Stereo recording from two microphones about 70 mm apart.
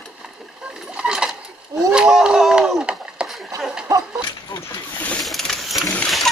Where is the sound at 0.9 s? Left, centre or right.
Centre.